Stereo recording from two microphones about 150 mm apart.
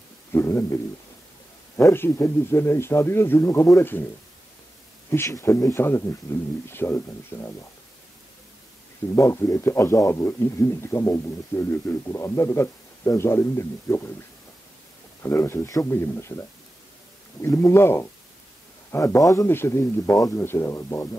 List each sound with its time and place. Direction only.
0.3 s a man's voice: 15° left (ahead or behind)
1.8 s a man's voice: 15° left (ahead or behind)
5.1 s a man's voice: 15° left (ahead or behind)
9.1 s a man's voice: 20° left (ahead or behind)
15.2 s a man's voice: 15° left (ahead or behind)